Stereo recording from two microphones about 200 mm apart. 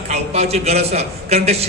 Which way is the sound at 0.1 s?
30° right (ahead or behind).